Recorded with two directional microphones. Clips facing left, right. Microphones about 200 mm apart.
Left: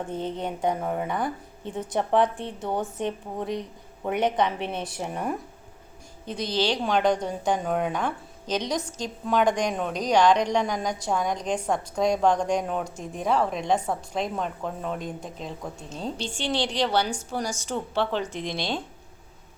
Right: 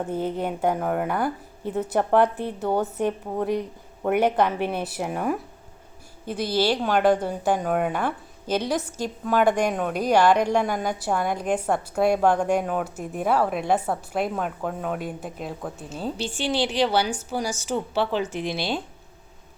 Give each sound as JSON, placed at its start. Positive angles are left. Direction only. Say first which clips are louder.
{"t": 0.0, "sound": "a woman's voice", "louder": "right 4 dB", "side_deg": -5}
{"t": 0.8, "sound": "speech", "louder": "right 3 dB", "side_deg": -75}
{"t": 1.0, "sound": "a woman's voice", "louder": "right 3 dB", "side_deg": -5}